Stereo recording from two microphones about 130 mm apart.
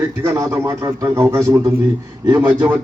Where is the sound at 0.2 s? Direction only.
25° right (ahead or behind).